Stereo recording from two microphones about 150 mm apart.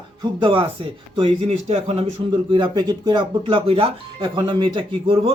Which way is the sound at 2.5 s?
30° right (ahead or behind).